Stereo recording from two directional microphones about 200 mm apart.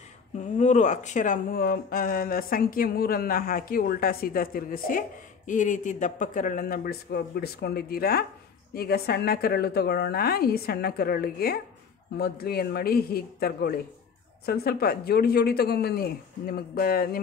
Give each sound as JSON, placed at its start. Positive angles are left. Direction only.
{"t": 0.6, "sound": "speech", "side_deg": 35}